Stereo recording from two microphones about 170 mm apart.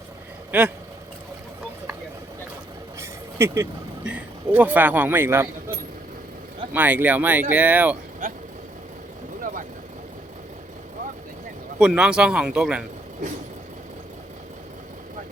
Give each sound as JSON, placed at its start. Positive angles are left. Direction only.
{"t": 0.5, "sound": "a man's voice", "side_deg": -10}
{"t": 3.0, "sound": "vehicle", "side_deg": -15}
{"t": 4.1, "sound": "a man's voice", "side_deg": -10}
{"t": 6.7, "sound": "a man's voice", "side_deg": -10}
{"t": 9.4, "sound": "vehicle", "side_deg": -50}
{"t": 11.8, "sound": "speech", "side_deg": -5}